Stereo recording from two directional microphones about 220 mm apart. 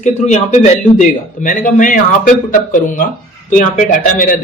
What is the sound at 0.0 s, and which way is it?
A man's voice, 30° left (ahead or behind).